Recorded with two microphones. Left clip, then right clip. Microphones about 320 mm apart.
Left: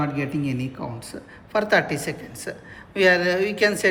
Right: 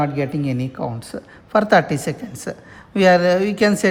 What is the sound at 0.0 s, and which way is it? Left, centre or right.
A man's voice, right.